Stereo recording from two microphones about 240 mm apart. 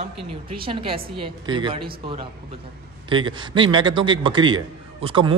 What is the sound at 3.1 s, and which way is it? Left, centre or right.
A man's voice, centre.